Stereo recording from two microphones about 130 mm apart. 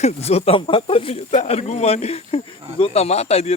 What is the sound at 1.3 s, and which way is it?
Speech, 60° left (ahead or behind).